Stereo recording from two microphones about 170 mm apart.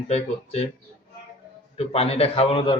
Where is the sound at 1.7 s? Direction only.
35° left (ahead or behind).